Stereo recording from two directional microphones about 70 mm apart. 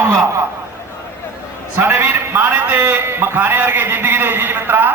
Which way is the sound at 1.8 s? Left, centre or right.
Right.